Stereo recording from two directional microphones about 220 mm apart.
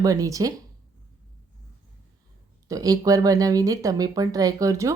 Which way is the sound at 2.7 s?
15° right (ahead or behind).